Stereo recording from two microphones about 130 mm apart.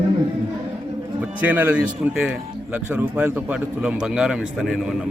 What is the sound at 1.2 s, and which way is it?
A man's voice, 15° right (ahead or behind).